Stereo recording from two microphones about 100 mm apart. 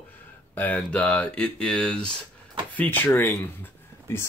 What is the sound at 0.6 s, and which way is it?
Speech, 15° left (ahead or behind).